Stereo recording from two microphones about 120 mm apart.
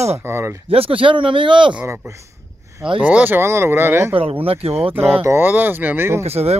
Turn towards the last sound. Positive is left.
turn(degrees=-60)  # may be behind; listen again after turning